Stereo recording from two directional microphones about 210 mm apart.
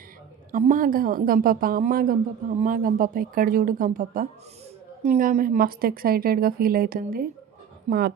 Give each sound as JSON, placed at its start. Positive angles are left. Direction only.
{"t": 0.5, "sound": "a woman's voice", "side_deg": -40}